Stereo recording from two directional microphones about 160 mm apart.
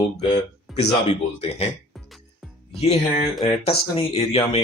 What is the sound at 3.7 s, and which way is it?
Speech, 35° left (ahead or behind).